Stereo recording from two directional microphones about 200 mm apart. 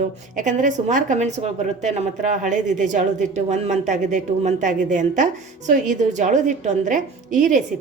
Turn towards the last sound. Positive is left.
turn(degrees=-40)  # may be behind; listen again after turning